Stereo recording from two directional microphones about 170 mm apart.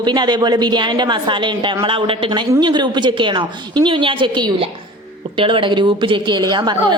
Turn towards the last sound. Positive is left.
turn(degrees=-25)  # may be behind; listen again after turning